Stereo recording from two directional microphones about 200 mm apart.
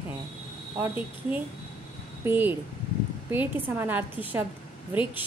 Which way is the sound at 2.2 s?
10° right (ahead or behind).